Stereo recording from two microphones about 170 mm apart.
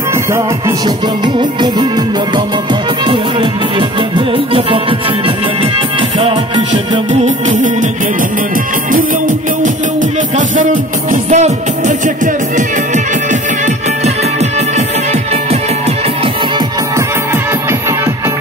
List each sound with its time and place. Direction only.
0.1 s music: 15° right (ahead or behind)
7.1 s music: 45° right (ahead or behind)
10.3 s music: 50° right (ahead or behind)